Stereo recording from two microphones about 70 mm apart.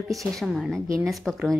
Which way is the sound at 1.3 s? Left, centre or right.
Centre.